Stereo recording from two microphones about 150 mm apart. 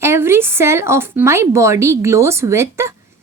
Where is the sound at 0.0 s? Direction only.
15° right (ahead or behind).